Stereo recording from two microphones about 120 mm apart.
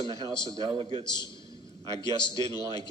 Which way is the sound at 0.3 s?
40° left (ahead or behind).